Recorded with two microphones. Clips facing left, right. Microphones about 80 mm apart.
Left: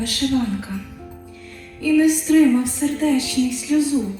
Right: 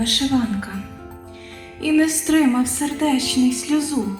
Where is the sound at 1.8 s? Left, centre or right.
Right.